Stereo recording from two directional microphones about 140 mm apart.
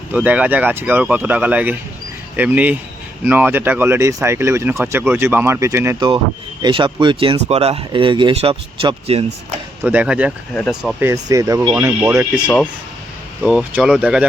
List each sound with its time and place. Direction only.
0.1 s speech: 10° right (ahead or behind)
6.6 s speech: 35° right (ahead or behind)
7.4 s speech: 50° right (ahead or behind)
9.8 s speech: 10° right (ahead or behind)
11.0 s speech: 25° right (ahead or behind)
13.4 s speech: 5° right (ahead or behind)